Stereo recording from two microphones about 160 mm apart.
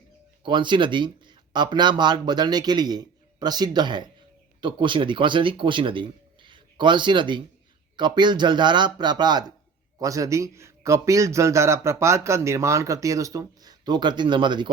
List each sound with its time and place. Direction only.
0.4 s speech: 30° right (ahead or behind)